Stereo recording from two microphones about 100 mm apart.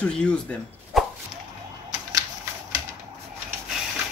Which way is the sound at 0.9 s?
Centre (ahead or behind).